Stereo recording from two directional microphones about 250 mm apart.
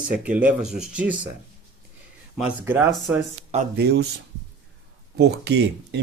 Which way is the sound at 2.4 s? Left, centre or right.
Centre.